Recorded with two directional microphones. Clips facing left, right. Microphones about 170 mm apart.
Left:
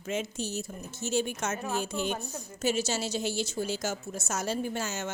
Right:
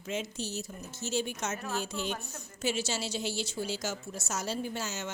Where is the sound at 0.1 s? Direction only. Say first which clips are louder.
Left 3 dB; 50° left (ahead or behind).